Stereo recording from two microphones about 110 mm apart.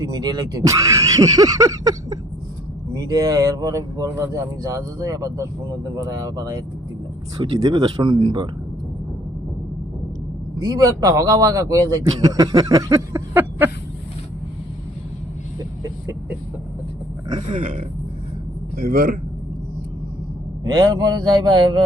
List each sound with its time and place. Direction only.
0.0 s speech: 35° right (ahead or behind)
7.7 s speech: 50° right (ahead or behind)
10.6 s speech: 30° right (ahead or behind)
17.2 s speech: 40° right (ahead or behind)
20.7 s speech: 25° right (ahead or behind)